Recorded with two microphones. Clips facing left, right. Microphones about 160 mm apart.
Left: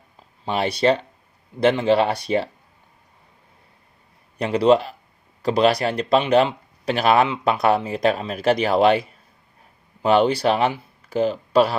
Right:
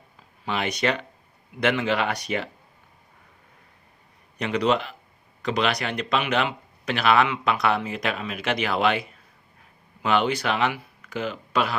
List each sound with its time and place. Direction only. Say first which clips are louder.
0.4 s speech: left 6 dB; 35° left (ahead or behind)
4.4 s speech: left 6 dB; 35° left (ahead or behind)